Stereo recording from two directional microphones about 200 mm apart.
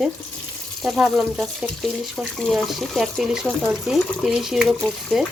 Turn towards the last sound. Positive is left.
turn(degrees=0)  # may be behind; listen again after turning